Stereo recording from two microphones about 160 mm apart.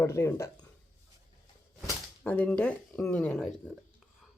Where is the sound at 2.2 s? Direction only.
10° left (ahead or behind).